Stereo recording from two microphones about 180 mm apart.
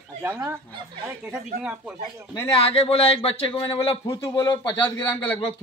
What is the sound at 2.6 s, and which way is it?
Speech, 35° left (ahead or behind).